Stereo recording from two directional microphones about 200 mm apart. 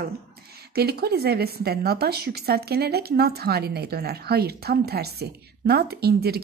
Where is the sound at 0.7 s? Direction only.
50° right (ahead or behind).